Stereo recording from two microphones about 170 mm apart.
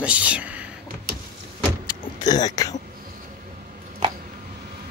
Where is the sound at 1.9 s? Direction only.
25° left (ahead or behind).